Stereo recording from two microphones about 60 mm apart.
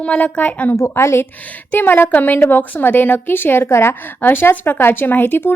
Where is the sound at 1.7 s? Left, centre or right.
Left.